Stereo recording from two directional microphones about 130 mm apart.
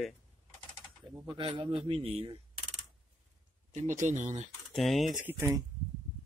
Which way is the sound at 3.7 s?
70° right (ahead or behind).